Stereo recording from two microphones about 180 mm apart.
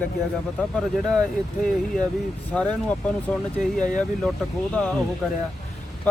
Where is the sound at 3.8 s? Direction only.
45° left (ahead or behind).